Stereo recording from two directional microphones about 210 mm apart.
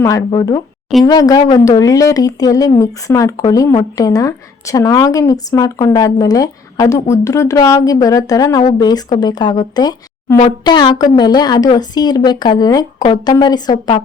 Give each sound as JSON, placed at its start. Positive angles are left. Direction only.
{"t": 0.0, "sound": "a woman's voice", "side_deg": 15}